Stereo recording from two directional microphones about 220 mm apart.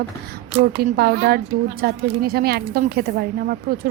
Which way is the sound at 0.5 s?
45° right (ahead or behind).